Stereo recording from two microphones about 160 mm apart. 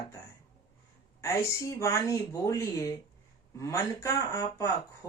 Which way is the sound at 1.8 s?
20° left (ahead or behind).